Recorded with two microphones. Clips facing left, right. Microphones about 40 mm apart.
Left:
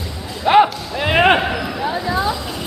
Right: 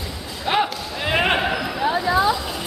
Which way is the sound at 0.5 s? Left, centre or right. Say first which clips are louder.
Left 9 dB; centre.